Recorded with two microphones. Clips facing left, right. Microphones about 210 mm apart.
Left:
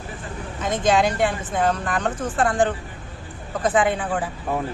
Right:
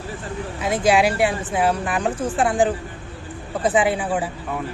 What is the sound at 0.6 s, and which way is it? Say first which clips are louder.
Speech: right 2 dB; 10° right (ahead or behind).